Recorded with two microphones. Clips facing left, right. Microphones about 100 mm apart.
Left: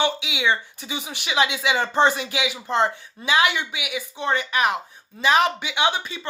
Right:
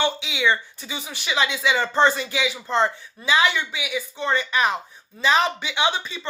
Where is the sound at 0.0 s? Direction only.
15° left (ahead or behind).